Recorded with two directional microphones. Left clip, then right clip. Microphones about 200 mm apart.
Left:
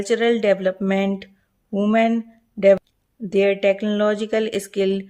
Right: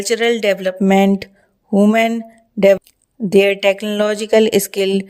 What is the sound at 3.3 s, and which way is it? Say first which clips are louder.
A woman's voice: right 5 dB; 40° right (ahead or behind).